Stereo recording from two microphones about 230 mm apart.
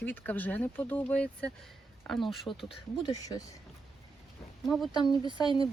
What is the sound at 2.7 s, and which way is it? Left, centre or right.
Speech, centre.